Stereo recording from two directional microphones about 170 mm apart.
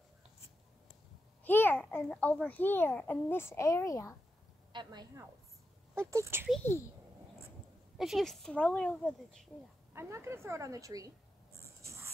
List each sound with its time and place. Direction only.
1.4 s a child's voice: 10° left (ahead or behind)
4.7 s a woman's voice: 25° right (ahead or behind)
6.6 s a child's voice: 15° left (ahead or behind)
8.0 s speech: centre (ahead or behind)
9.9 s speech: 15° right (ahead or behind)
11.5 s a sound: 15° right (ahead or behind)